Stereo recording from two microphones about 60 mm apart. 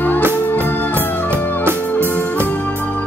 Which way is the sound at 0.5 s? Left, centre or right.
Left.